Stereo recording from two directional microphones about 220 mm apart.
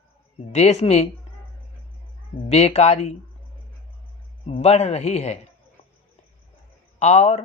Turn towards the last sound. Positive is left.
turn(degrees=30)  # may be behind; listen again after turning